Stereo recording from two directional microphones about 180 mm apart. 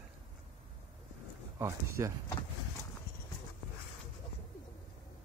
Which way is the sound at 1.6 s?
15° right (ahead or behind).